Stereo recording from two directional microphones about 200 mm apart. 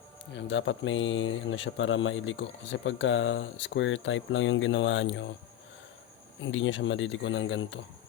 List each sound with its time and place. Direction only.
0.3 s speech: 65° left (ahead or behind)
6.4 s speech: 70° left (ahead or behind)